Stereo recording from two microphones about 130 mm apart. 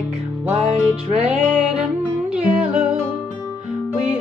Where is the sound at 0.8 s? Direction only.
5° right (ahead or behind).